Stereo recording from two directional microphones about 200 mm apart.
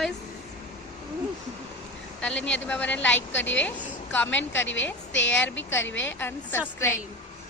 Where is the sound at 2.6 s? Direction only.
5° left (ahead or behind).